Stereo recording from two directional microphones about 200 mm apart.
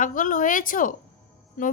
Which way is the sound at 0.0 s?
40° left (ahead or behind).